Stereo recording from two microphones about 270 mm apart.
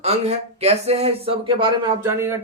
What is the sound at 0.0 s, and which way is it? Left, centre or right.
Speech, right.